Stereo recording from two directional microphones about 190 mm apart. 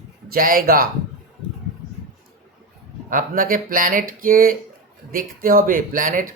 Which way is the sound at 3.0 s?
45° right (ahead or behind).